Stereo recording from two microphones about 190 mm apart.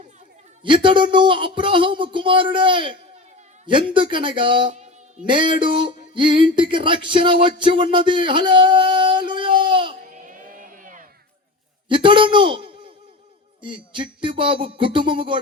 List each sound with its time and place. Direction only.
0.6 s speech: 25° right (ahead or behind)
10.2 s a sound: 45° right (ahead or behind)
11.9 s a man's voice: 25° right (ahead or behind)